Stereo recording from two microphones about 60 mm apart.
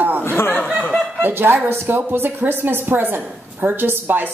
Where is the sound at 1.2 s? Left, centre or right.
Right.